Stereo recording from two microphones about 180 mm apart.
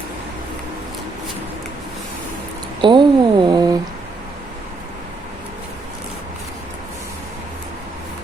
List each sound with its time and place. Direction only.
2.8 s speech: 25° right (ahead or behind)